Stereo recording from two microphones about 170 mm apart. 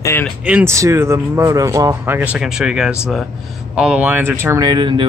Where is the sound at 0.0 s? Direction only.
15° left (ahead or behind).